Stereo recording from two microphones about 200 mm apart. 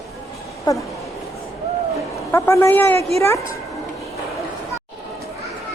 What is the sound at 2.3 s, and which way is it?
Speech, 15° left (ahead or behind).